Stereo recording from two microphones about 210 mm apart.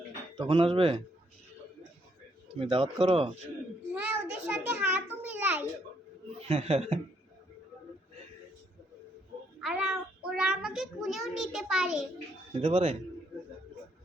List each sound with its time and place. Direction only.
0.3 s speech: 25° right (ahead or behind)
2.6 s speech: 25° right (ahead or behind)
3.9 s a sound: 5° right (ahead or behind)
6.5 s speech: 30° right (ahead or behind)
9.6 s a child's voice: 5° right (ahead or behind)
12.5 s speech: 30° right (ahead or behind)